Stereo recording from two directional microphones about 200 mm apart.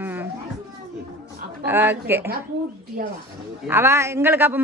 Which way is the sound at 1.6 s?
10° right (ahead or behind).